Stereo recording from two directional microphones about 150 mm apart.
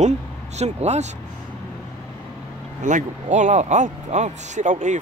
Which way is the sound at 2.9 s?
55° right (ahead or behind).